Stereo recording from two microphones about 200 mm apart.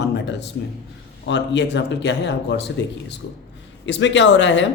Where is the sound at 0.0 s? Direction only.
60° left (ahead or behind).